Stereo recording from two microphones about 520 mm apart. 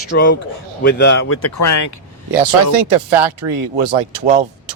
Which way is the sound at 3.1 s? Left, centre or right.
Right.